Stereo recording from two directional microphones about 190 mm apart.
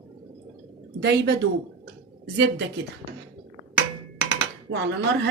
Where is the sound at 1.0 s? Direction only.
60° right (ahead or behind).